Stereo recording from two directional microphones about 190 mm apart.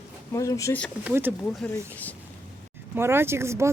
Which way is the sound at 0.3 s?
15° left (ahead or behind).